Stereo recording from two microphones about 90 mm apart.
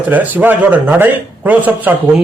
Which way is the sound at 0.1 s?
20° right (ahead or behind).